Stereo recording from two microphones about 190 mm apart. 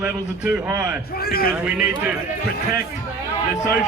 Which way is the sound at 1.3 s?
55° left (ahead or behind).